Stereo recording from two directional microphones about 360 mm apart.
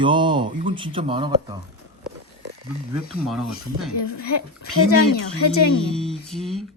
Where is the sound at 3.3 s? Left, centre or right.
Centre.